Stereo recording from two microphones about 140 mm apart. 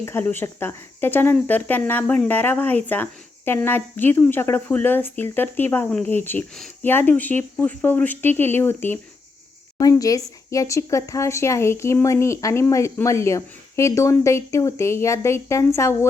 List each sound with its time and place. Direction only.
0.0 s speech: 15° left (ahead or behind)